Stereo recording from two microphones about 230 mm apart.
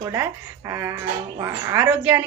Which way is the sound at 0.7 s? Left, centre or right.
Centre.